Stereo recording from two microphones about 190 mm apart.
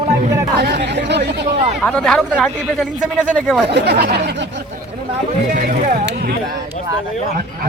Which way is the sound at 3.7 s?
60° right (ahead or behind).